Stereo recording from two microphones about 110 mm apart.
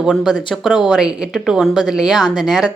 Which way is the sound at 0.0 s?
5° right (ahead or behind).